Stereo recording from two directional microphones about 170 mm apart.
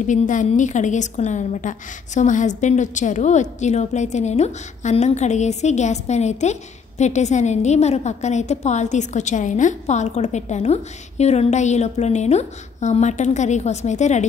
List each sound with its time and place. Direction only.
0.0 s a woman's voice: 45° left (ahead or behind)